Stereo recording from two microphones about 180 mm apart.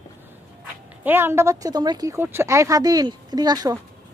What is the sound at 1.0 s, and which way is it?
A woman's voice, 10° right (ahead or behind).